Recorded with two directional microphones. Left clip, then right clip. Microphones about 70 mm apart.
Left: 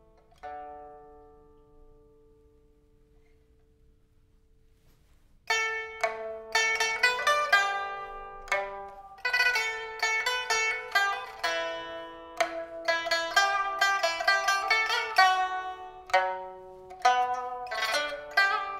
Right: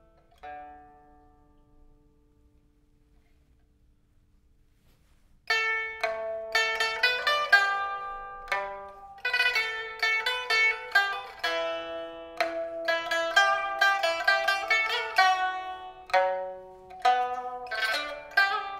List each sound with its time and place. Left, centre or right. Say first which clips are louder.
0.1 s music: left 1 dB; centre
5.4 s music: right 2 dB; centre
8.1 s zither: even; centre
9.1 s music: even; centre
15.3 s music: even; centre
15.6 s zither: even; centre